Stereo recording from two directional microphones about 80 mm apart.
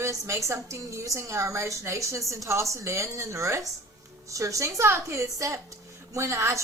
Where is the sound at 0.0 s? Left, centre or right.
Right.